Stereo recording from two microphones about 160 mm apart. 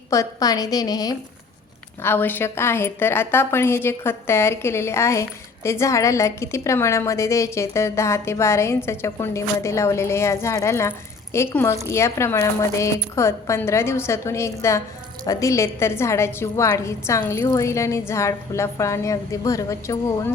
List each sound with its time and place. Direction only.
0.1 s a woman's voice: 20° left (ahead or behind)
2.0 s a woman's voice: 15° left (ahead or behind)